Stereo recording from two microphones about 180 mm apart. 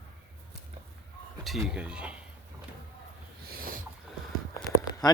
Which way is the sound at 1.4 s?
Centre (ahead or behind).